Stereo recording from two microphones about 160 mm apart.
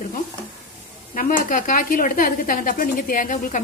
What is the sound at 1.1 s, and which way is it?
A woman's voice, 60° left (ahead or behind).